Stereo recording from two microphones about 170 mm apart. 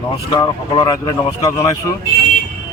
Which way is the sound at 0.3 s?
25° left (ahead or behind).